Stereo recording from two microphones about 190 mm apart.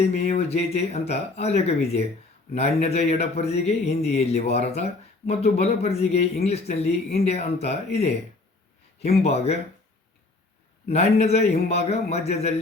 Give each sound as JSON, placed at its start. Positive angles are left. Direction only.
{"t": 0.0, "sound": "speech", "side_deg": 35}
{"t": 9.2, "sound": "speech", "side_deg": 35}
{"t": 10.8, "sound": "speech", "side_deg": 35}